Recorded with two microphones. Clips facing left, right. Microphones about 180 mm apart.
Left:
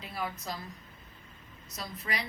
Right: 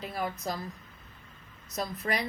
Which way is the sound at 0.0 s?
45° right (ahead or behind).